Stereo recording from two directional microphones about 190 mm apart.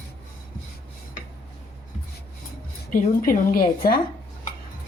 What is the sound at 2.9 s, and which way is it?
A woman's voice, 45° left (ahead or behind).